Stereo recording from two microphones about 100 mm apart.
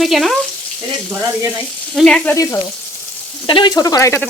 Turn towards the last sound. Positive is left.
turn(degrees=35)  # may be behind; listen again after turning